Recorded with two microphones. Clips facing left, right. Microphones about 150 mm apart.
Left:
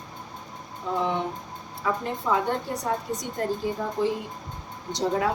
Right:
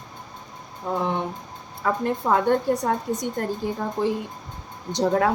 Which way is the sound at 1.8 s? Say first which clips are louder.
Right 4 dB; 50° right (ahead or behind).